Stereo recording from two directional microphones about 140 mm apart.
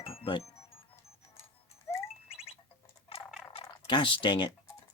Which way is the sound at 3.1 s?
45° left (ahead or behind).